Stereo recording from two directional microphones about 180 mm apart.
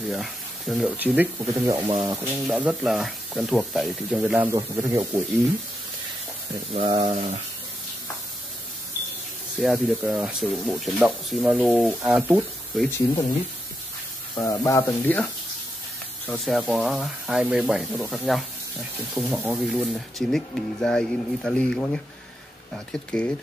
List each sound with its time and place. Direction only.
0.1 s speech: centre (ahead or behind)
1.7 s a man's voice: 25° right (ahead or behind)
2.3 s speech: 5° right (ahead or behind)
4.6 s a man's voice: 20° right (ahead or behind)
6.7 s a man's voice: 25° right (ahead or behind)
9.6 s speech: centre (ahead or behind)
12.9 s speech: 20° left (ahead or behind)
14.3 s speech: 20° left (ahead or behind)
16.4 s speech: centre (ahead or behind)